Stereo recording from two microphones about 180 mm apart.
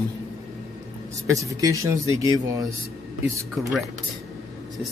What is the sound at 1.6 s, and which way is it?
Speech, 15° right (ahead or behind).